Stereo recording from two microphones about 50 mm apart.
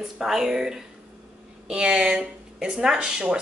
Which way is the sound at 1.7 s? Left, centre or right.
Right.